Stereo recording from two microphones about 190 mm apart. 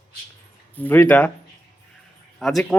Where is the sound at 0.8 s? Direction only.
10° left (ahead or behind).